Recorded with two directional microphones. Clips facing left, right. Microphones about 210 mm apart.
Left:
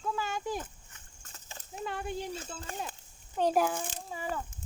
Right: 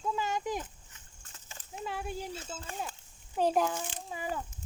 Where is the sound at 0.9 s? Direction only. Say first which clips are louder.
Left 2 dB; 50° left (ahead or behind).